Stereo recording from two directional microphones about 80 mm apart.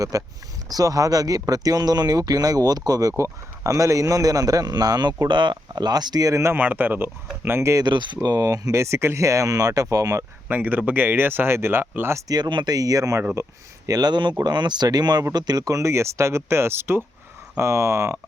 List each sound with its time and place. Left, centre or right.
0.0 s speech: right
7.9 s speech: right
10.5 s speech: right
12.3 s speech: right
12.7 s speech: right
13.8 s speech: right